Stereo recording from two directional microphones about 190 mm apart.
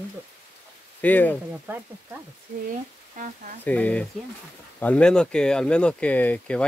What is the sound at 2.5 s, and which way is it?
Speech, 40° right (ahead or behind).